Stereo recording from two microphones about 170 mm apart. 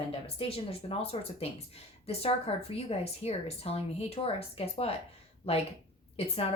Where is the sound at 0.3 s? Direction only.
35° left (ahead or behind).